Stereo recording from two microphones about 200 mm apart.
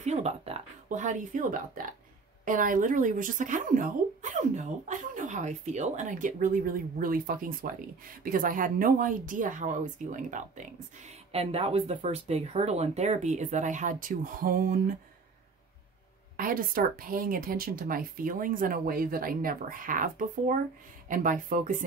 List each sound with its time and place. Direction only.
0.0 s speech: 35° right (ahead or behind)
16.3 s speech: 45° right (ahead or behind)